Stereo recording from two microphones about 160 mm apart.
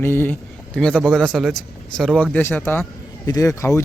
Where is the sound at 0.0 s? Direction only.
15° left (ahead or behind).